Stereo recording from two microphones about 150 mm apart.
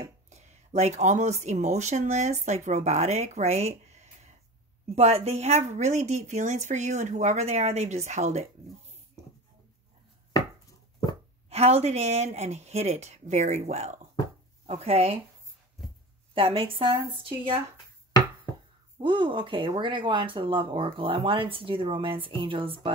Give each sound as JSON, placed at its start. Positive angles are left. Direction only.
{"t": 0.3, "sound": "speech", "side_deg": -45}
{"t": 11.4, "sound": "speech", "side_deg": -45}
{"t": 16.3, "sound": "speech", "side_deg": -35}
{"t": 18.9, "sound": "speech", "side_deg": -35}